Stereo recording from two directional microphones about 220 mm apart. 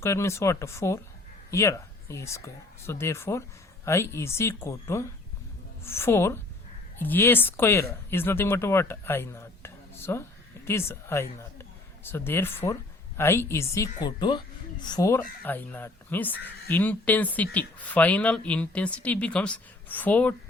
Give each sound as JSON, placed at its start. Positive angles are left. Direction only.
{"t": 0.0, "sound": "speech", "side_deg": 15}